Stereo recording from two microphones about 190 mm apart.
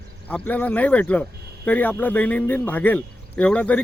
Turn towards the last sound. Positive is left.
turn(degrees=5)  # may be behind; listen again after turning